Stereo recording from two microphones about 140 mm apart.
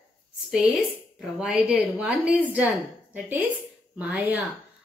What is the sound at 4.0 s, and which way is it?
Speech, 10° right (ahead or behind).